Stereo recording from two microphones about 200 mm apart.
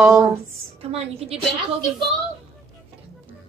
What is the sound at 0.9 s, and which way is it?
Speech, 30° right (ahead or behind).